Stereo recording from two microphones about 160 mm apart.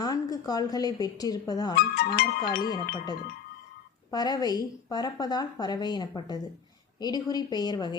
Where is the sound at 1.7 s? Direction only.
70° left (ahead or behind).